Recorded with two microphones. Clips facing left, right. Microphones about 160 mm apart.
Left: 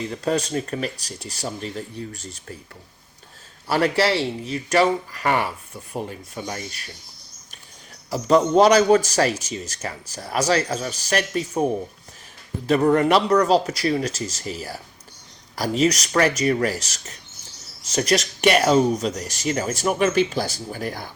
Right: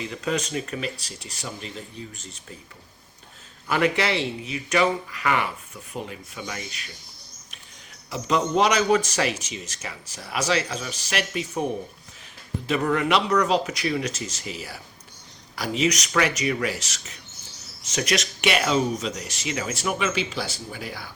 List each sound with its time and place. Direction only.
0.3 s speech: 35° left (ahead or behind)
3.7 s speech: 40° left (ahead or behind)
8.1 s speech: 40° left (ahead or behind)
12.6 s speech: 40° left (ahead or behind)